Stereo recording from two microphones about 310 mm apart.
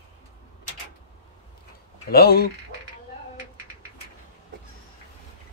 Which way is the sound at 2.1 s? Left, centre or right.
Left.